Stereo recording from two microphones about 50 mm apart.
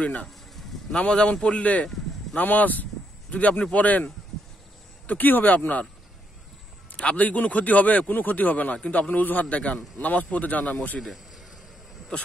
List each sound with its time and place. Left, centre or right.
0.0 s a man's voice: left
7.0 s a man's voice: left